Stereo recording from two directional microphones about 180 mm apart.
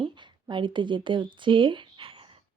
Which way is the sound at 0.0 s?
25° right (ahead or behind).